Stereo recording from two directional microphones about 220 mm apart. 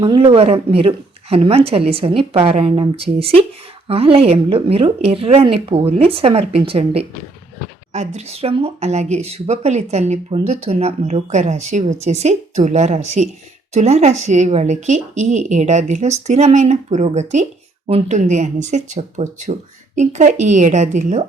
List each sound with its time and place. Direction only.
0.0 s speech: 25° right (ahead or behind)